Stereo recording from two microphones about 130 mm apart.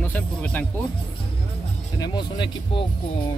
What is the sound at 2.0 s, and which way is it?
Speech, 35° left (ahead or behind).